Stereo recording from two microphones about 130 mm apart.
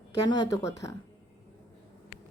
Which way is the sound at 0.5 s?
25° left (ahead or behind).